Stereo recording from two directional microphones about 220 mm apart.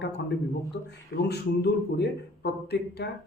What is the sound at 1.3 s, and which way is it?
Speech, 50° left (ahead or behind).